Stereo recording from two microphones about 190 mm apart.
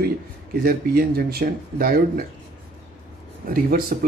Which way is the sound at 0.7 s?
55° right (ahead or behind).